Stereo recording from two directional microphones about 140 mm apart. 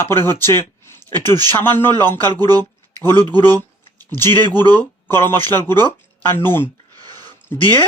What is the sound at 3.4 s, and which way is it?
Speech, 15° left (ahead or behind).